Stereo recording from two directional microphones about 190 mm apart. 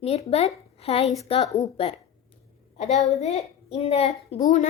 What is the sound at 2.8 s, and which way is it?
Speech, 35° left (ahead or behind).